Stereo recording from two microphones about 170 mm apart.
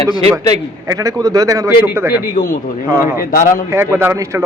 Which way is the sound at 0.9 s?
20° right (ahead or behind).